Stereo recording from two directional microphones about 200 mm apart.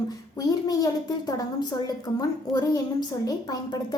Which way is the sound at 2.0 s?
20° left (ahead or behind).